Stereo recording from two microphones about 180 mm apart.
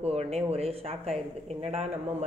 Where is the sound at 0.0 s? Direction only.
35° right (ahead or behind).